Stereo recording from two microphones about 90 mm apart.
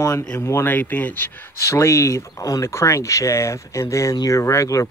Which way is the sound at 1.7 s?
30° left (ahead or behind).